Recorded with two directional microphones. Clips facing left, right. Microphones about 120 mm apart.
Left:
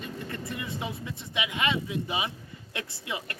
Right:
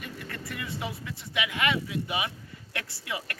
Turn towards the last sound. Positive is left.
turn(degrees=25)  # may be behind; listen again after turning